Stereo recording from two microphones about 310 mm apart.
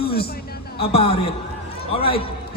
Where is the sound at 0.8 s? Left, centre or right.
Centre.